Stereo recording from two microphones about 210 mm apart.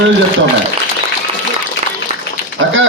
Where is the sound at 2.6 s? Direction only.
70° right (ahead or behind).